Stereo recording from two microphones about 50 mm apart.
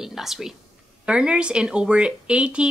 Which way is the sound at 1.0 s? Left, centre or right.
Centre.